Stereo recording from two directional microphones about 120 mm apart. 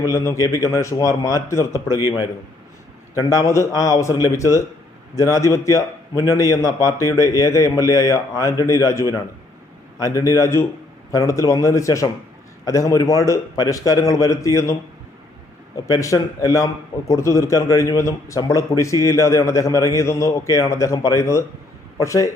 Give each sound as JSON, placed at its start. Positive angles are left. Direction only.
{"t": 0.0, "sound": "a man's voice", "side_deg": 30}
{"t": 3.2, "sound": "a man's voice", "side_deg": 30}